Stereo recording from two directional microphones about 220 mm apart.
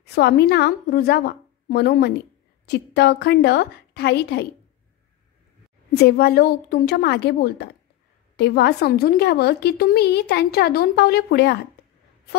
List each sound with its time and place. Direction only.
0.0 s a woman's voice: 45° left (ahead or behind)
5.9 s a woman's voice: 45° left (ahead or behind)